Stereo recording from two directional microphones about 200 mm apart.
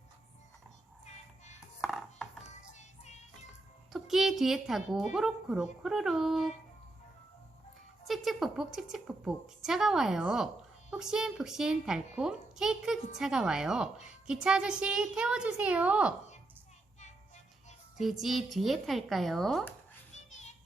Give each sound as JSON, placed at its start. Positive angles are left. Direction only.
{"t": 1.8, "sound": "music", "side_deg": 0}
{"t": 2.7, "sound": "music", "side_deg": 35}
{"t": 3.9, "sound": "a woman's voice", "side_deg": 0}
{"t": 8.0, "sound": "a woman's voice", "side_deg": 0}
{"t": 18.0, "sound": "a woman's voice", "side_deg": 0}
{"t": 20.1, "sound": "children playing", "side_deg": 35}